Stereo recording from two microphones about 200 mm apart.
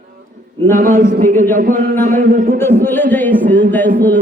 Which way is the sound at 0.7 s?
40° right (ahead or behind).